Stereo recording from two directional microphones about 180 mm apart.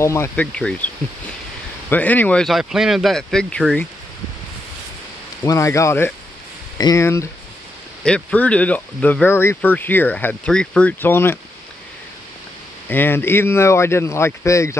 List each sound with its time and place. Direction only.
0.0 s speech: 15° left (ahead or behind)
1.9 s speech: 10° left (ahead or behind)
5.4 s speech: 15° left (ahead or behind)
8.0 s speech: 5° left (ahead or behind)
12.8 s speech: 10° left (ahead or behind)